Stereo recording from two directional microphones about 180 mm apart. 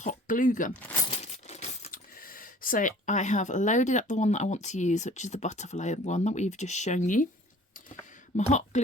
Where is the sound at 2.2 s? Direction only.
50° left (ahead or behind).